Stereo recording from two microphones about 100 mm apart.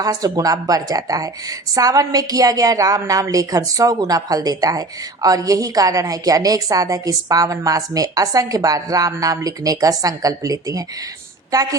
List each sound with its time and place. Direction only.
0.0 s speech: 40° right (ahead or behind)